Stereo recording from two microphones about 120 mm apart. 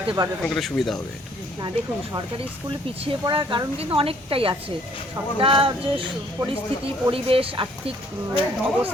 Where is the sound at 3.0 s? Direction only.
45° right (ahead or behind).